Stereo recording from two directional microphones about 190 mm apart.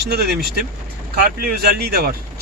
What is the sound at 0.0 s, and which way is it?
Speech, 60° right (ahead or behind).